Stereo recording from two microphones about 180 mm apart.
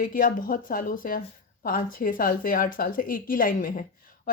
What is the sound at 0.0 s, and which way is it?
Speech, 50° left (ahead or behind).